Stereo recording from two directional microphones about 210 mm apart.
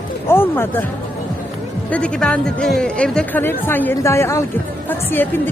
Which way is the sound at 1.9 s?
5° left (ahead or behind).